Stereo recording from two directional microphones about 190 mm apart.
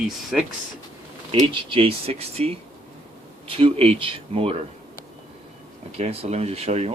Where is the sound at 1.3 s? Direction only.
30° right (ahead or behind).